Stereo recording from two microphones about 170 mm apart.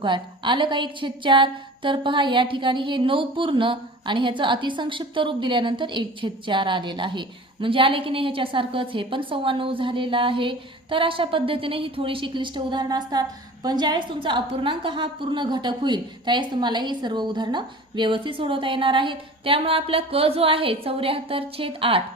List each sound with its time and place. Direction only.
0.0 s a woman's voice: 30° right (ahead or behind)